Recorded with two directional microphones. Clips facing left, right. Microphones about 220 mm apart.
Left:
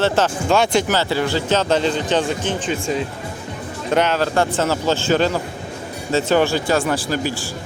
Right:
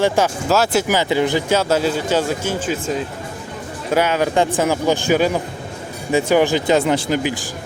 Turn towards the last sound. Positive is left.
turn(degrees=-15)  # may be behind; listen again after turning